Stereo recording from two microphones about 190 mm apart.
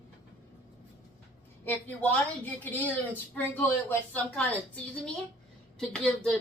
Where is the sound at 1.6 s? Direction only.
10° left (ahead or behind).